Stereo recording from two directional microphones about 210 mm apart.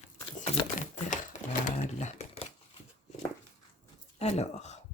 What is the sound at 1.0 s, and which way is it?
Sewing machine, 40° left (ahead or behind).